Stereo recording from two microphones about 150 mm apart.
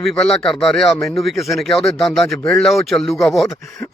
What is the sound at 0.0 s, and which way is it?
Speech, 5° left (ahead or behind).